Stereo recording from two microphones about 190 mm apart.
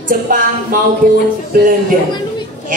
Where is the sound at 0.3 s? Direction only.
45° right (ahead or behind).